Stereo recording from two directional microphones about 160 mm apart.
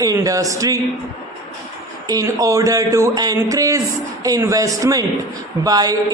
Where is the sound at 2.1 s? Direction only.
20° right (ahead or behind).